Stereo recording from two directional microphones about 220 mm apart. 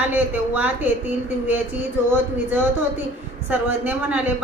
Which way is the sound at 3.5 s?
10° right (ahead or behind).